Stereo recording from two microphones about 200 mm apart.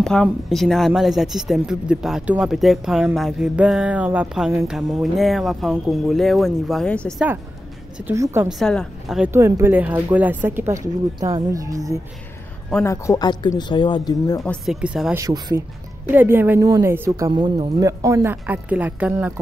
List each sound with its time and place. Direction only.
0.0 s speech: centre (ahead or behind)
8.1 s speech: 10° right (ahead or behind)
8.5 s speech: centre (ahead or behind)
9.3 s speech: 10° right (ahead or behind)
12.8 s speech: 15° left (ahead or behind)
14.4 s speech: centre (ahead or behind)
15.1 s speech: 20° right (ahead or behind)